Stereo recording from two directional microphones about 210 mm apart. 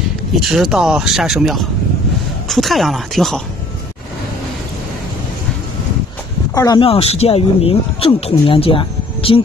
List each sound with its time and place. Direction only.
0.4 s speech: centre (ahead or behind)
6.5 s speech: 15° left (ahead or behind)